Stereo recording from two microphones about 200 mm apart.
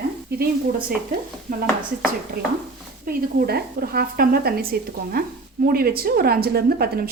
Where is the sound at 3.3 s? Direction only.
50° right (ahead or behind).